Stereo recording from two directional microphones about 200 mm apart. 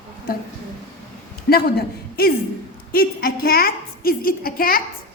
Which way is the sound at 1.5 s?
50° left (ahead or behind).